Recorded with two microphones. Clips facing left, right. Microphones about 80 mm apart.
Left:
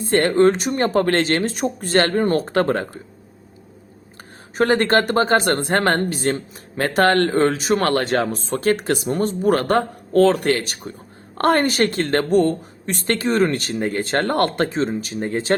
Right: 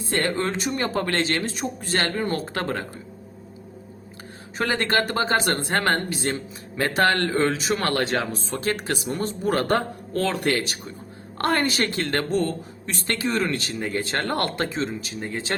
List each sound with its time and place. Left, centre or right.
0.0 s a woman's voice: left
4.5 s speech: left
5.8 s speech: left
6.1 s a woman's voice: left
13.8 s a woman's voice: left